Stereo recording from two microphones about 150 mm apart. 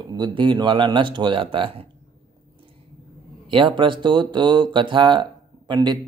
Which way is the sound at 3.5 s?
35° right (ahead or behind).